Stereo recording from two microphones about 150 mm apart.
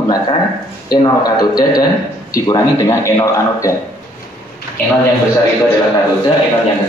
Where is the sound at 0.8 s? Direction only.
25° left (ahead or behind).